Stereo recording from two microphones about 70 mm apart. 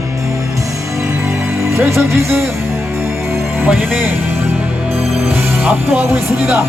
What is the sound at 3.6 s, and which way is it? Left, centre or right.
Speech, right.